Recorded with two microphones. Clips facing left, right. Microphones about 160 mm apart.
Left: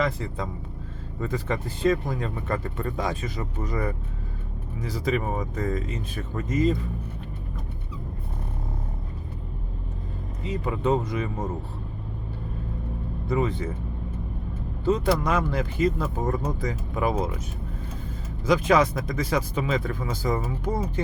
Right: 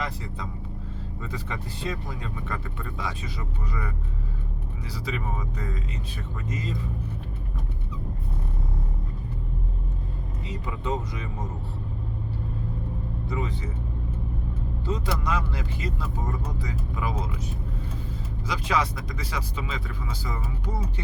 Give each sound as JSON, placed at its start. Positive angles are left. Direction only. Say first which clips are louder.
{"t": 1.2, "sound": "speech", "louder": "left 8 dB", "side_deg": 50}
{"t": 10.7, "sound": "speech", "louder": "left 7 dB", "side_deg": 55}
{"t": 13.2, "sound": "speech", "louder": "left 8 dB", "side_deg": 55}
{"t": 14.8, "sound": "speech", "louder": "left 7 dB", "side_deg": 50}
{"t": 18.4, "sound": "speech", "louder": "left 7 dB", "side_deg": 50}